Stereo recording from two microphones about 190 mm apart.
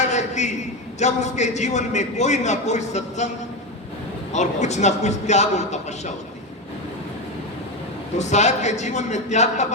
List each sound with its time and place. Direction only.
0.0 s a sound: 35° left (ahead or behind)
0.9 s a man's voice: 35° left (ahead or behind)
4.3 s a man's voice: 35° left (ahead or behind)
8.2 s a man's voice: 35° left (ahead or behind)